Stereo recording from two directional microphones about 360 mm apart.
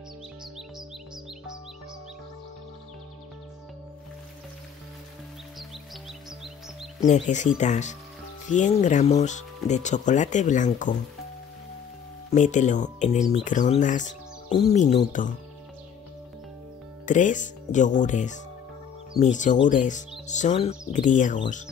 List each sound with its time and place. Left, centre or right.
7.0 s speech: centre
12.3 s speech: centre
17.0 s speech: left